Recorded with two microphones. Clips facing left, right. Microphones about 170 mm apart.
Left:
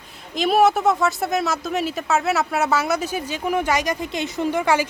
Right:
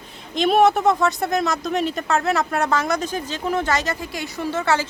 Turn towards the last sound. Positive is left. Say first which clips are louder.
# left 2 dB
turn(degrees=10)  # may be behind; listen again after turning